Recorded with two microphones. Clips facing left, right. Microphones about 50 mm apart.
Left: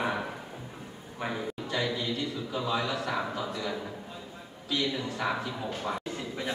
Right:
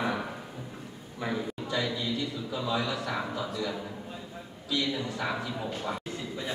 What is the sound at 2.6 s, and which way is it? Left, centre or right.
Speech, left.